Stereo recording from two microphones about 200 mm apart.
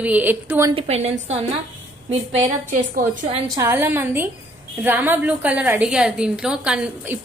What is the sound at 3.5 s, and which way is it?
A woman's voice, 10° right (ahead or behind).